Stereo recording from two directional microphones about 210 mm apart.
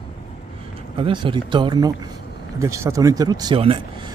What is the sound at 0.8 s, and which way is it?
Speech, 25° right (ahead or behind).